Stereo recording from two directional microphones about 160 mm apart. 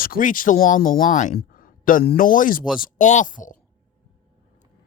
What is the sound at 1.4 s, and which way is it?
A man's voice, 60° left (ahead or behind).